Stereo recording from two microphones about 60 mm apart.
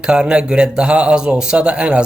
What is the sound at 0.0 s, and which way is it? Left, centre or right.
A man's voice, centre.